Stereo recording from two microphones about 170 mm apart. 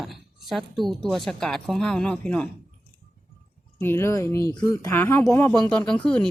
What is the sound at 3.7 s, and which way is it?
Speech, 15° left (ahead or behind).